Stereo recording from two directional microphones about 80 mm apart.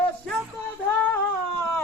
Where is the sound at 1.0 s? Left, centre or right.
Left.